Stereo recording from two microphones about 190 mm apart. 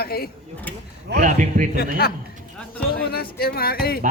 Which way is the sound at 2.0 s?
55° left (ahead or behind).